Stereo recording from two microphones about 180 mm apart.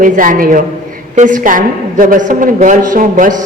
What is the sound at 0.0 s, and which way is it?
A woman's voice, 50° right (ahead or behind).